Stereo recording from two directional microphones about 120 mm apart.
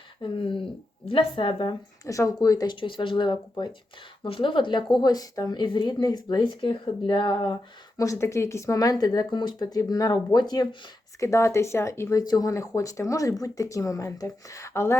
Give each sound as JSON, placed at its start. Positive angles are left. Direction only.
{"t": 0.2, "sound": "a woman's voice", "side_deg": 45}
{"t": 2.0, "sound": "speech", "side_deg": 25}
{"t": 2.8, "sound": "a woman's voice", "side_deg": 45}
{"t": 7.9, "sound": "speech", "side_deg": 25}
{"t": 11.2, "sound": "speech", "side_deg": 25}